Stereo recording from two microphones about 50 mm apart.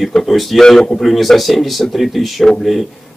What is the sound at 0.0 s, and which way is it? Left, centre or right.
Speech, centre.